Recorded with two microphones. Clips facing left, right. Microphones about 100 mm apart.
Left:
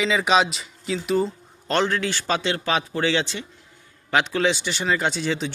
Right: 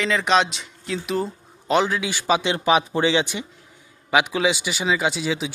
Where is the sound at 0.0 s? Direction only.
5° left (ahead or behind).